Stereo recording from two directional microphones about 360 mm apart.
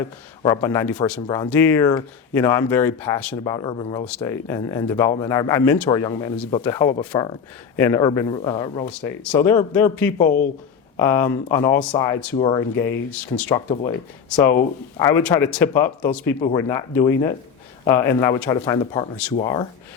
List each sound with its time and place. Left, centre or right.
0.4 s speech: centre
6.3 s speech: centre
10.2 s speech: left
10.9 s speech: centre
14.9 s speech: centre